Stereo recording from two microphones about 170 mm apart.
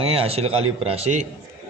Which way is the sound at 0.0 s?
35° right (ahead or behind).